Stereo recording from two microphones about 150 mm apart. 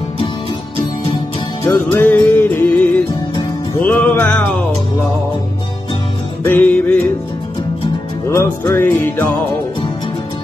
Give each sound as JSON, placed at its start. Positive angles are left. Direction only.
{"t": 1.6, "sound": "music", "side_deg": 20}
{"t": 6.4, "sound": "music", "side_deg": 10}
{"t": 8.4, "sound": "music", "side_deg": 15}